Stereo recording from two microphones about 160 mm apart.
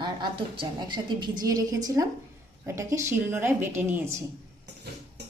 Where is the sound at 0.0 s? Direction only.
30° right (ahead or behind); by 4.1 s 10° right (ahead or behind).